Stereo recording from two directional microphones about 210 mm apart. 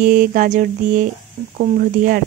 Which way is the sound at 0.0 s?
40° right (ahead or behind).